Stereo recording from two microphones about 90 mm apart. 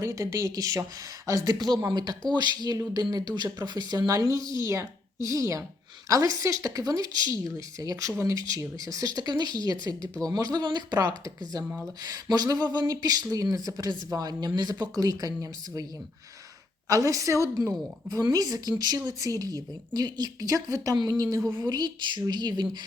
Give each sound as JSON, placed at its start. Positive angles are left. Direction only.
{"t": 0.0, "sound": "a woman's voice", "side_deg": -35}
{"t": 16.9, "sound": "a woman's voice", "side_deg": -40}